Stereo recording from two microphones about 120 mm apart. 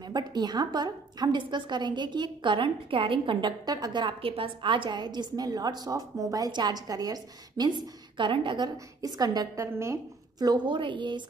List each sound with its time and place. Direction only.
0.0 s a woman's voice: 35° right (ahead or behind)
10.4 s a woman's voice: 35° right (ahead or behind)